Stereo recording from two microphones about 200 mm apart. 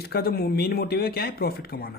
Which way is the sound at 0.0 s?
50° left (ahead or behind).